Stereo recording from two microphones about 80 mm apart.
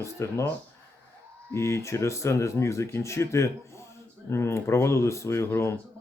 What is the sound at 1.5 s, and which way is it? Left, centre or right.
Speech, left.